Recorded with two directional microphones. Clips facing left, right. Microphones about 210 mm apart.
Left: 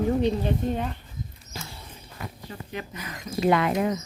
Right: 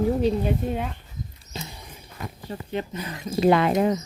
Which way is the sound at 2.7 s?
30° right (ahead or behind).